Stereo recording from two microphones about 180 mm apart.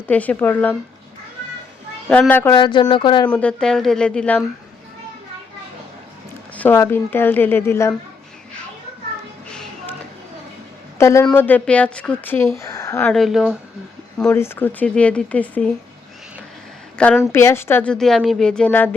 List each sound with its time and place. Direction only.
0.1 s speech: 10° left (ahead or behind)
2.0 s speech: 10° left (ahead or behind)
2.6 s speech: 25° left (ahead or behind)
3.2 s speech: 5° left (ahead or behind)
6.6 s speech: 10° left (ahead or behind)
9.5 s music: 5° left (ahead or behind)
10.9 s a man's voice: 15° left (ahead or behind)
13.1 s speech: centre (ahead or behind)
14.2 s speech: 10° left (ahead or behind)
17.0 s speech: 5° left (ahead or behind)